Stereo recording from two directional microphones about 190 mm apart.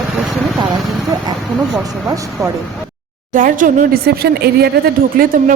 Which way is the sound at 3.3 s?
45° right (ahead or behind).